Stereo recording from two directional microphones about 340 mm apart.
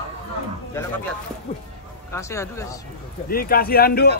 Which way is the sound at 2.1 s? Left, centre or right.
Centre.